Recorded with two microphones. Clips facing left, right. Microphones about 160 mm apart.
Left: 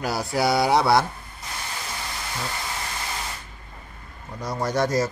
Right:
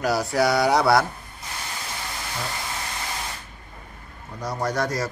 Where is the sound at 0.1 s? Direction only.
25° left (ahead or behind).